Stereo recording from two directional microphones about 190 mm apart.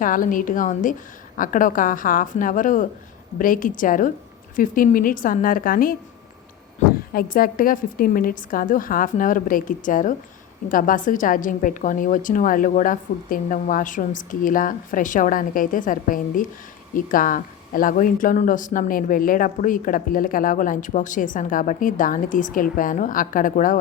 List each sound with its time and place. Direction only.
0.0 s speech: 45° left (ahead or behind)
7.1 s speech: 50° left (ahead or behind)